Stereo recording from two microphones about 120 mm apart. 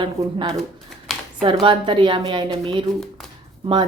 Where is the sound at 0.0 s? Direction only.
45° right (ahead or behind).